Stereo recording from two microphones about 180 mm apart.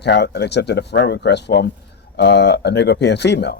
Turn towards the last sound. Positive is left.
turn(degrees=70)  # may be behind; listen again after turning